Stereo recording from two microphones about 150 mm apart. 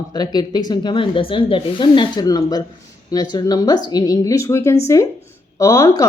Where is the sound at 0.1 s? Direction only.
30° left (ahead or behind).